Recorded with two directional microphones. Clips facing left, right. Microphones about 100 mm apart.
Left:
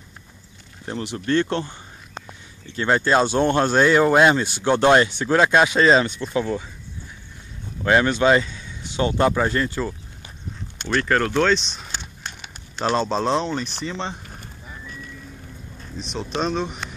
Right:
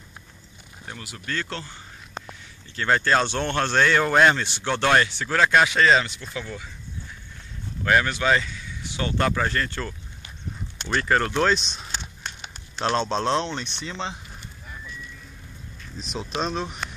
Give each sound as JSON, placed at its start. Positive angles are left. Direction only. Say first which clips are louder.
{"t": 0.8, "sound": "speech", "louder": "left 10 dB", "side_deg": 30}
{"t": 7.8, "sound": "speech", "louder": "left 4 dB", "side_deg": 25}
{"t": 10.9, "sound": "speech", "louder": "left 2 dB", "side_deg": -5}
{"t": 16.0, "sound": "speech", "louder": "left 3 dB", "side_deg": 0}